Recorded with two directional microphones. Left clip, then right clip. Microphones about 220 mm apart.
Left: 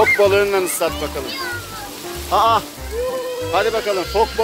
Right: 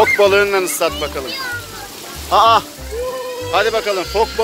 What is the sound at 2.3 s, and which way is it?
Speech, 5° right (ahead or behind).